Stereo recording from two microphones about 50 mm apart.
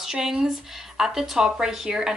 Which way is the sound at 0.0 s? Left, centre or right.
Centre.